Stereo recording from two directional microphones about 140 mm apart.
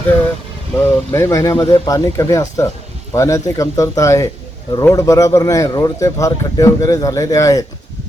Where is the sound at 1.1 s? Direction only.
20° left (ahead or behind).